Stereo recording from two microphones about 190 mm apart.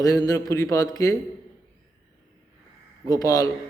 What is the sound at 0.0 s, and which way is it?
Speech, 20° left (ahead or behind).